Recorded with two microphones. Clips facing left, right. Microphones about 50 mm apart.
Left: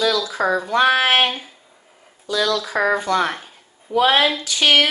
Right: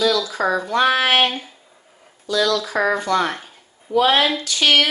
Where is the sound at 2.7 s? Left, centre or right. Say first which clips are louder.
Left 1 dB; centre.